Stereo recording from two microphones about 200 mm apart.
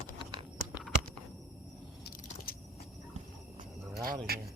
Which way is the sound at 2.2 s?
40° left (ahead or behind).